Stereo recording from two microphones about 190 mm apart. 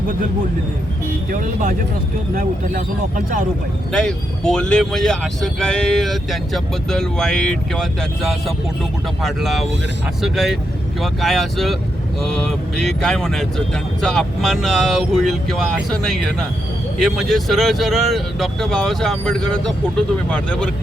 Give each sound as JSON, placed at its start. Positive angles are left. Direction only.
{"t": 2.3, "sound": "speech", "side_deg": -45}
{"t": 3.9, "sound": "speech", "side_deg": 5}
{"t": 13.0, "sound": "speech", "side_deg": 5}